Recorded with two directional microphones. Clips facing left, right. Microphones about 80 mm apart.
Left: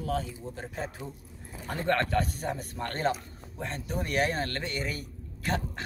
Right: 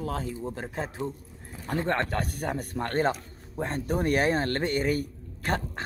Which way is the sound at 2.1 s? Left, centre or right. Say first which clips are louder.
Left 1 dB; right.